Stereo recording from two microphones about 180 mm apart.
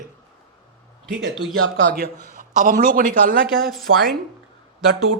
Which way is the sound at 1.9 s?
50° right (ahead or behind).